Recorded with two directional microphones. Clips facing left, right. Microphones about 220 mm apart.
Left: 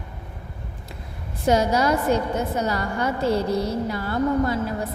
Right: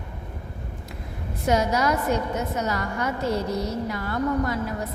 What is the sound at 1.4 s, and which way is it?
A woman's voice, 30° left (ahead or behind).